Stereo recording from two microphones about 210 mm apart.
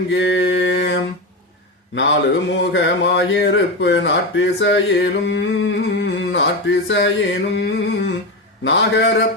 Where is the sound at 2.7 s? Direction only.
60° left (ahead or behind).